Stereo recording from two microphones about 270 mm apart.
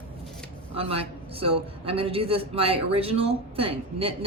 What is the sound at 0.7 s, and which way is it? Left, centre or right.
A man's voice, right.